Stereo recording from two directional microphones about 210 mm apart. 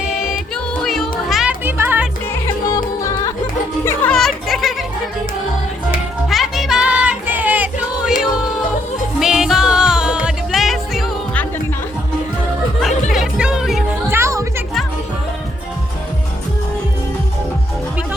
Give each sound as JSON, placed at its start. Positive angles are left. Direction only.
{"t": 0.2, "sound": "music", "side_deg": 0}
{"t": 2.3, "sound": "yodeling", "side_deg": 15}
{"t": 3.8, "sound": "music", "side_deg": 5}
{"t": 6.2, "sound": "music", "side_deg": 0}
{"t": 9.1, "sound": "music", "side_deg": 0}
{"t": 13.1, "sound": "music", "side_deg": -5}
{"t": 14.2, "sound": "music", "side_deg": -15}